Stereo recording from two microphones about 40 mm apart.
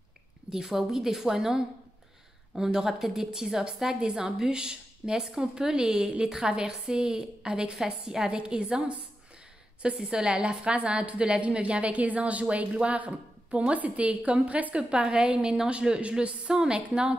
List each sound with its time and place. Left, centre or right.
0.5 s a woman's voice: centre
9.9 s speech: centre; by 14.9 s right
14.9 s speech: right